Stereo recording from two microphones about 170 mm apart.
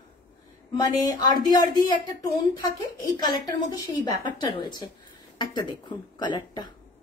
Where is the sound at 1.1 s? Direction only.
25° left (ahead or behind).